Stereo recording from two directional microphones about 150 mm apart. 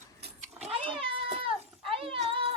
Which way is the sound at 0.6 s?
35° right (ahead or behind).